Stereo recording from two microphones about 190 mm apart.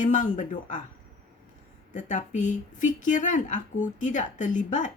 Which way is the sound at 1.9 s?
40° left (ahead or behind).